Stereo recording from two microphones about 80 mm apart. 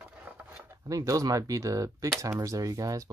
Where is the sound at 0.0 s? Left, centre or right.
Right.